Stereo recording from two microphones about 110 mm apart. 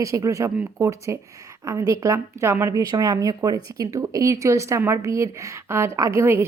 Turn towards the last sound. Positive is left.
turn(degrees=-20)  # may be behind; listen again after turning